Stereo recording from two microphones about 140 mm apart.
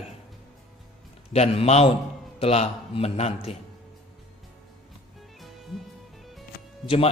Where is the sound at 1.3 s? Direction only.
45° left (ahead or behind).